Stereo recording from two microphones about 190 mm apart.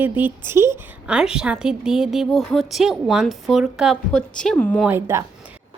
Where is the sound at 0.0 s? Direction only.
10° right (ahead or behind); by 4.8 s 10° left (ahead or behind).